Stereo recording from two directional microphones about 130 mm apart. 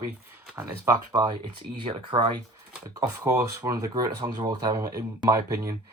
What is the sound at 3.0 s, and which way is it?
Speech, 25° right (ahead or behind).